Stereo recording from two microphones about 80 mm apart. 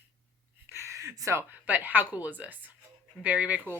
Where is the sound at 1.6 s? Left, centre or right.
Right.